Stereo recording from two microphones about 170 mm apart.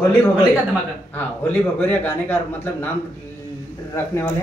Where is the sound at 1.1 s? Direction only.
10° left (ahead or behind).